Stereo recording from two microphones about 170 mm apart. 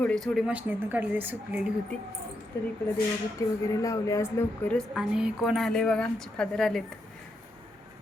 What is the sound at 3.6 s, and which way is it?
Speech, 20° left (ahead or behind).